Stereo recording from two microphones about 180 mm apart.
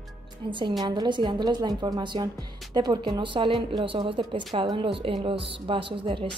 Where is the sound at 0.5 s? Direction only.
25° right (ahead or behind).